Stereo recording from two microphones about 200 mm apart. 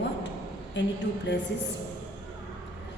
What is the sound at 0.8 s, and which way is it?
Speech, 65° left (ahead or behind).